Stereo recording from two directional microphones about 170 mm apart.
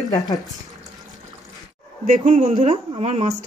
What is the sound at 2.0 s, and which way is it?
A woman's voice, 45° right (ahead or behind).